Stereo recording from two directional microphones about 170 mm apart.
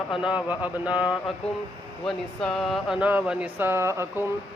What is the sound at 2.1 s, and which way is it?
Speech, centre (ahead or behind).